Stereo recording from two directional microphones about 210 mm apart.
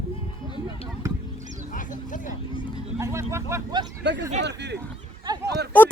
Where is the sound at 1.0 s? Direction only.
15° right (ahead or behind).